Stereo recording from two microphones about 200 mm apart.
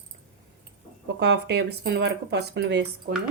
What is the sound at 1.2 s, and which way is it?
Speech, 60° right (ahead or behind).